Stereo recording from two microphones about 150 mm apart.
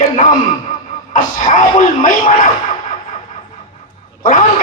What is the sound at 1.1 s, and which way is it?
A man's voice, 60° left (ahead or behind).